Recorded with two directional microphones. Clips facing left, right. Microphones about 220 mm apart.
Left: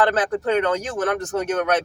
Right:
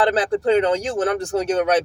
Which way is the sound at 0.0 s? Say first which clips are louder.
Right 2 dB; 30° right (ahead or behind).